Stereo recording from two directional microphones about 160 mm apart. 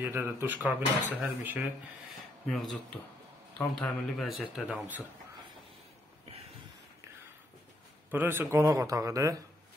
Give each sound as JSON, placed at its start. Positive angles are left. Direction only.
{"t": 0.0, "sound": "speech", "side_deg": -15}
{"t": 2.4, "sound": "speech", "side_deg": 0}
{"t": 4.4, "sound": "speech", "side_deg": -5}
{"t": 8.1, "sound": "a man's voice", "side_deg": -15}